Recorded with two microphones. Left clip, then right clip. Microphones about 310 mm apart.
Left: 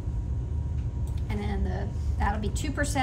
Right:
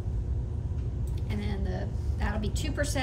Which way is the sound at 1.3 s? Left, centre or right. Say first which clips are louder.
Left 3 dB; centre.